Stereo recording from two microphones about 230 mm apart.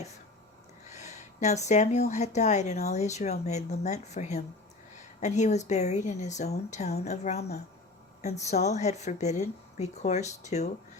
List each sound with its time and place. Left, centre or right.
0.9 s speech: left